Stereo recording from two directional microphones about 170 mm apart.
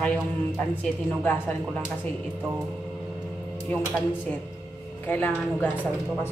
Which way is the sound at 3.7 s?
5° left (ahead or behind).